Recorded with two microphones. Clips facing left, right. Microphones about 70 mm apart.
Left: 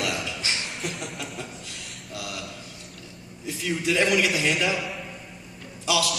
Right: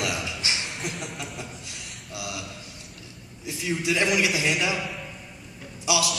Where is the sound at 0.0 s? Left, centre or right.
Centre.